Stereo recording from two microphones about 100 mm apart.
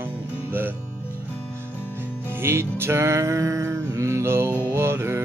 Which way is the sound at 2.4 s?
25° right (ahead or behind).